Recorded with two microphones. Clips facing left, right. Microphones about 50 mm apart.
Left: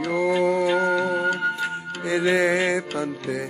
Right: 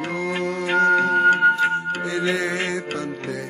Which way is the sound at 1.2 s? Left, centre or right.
Right.